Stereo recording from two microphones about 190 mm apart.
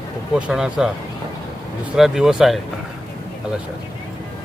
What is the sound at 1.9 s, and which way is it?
Speech, centre (ahead or behind).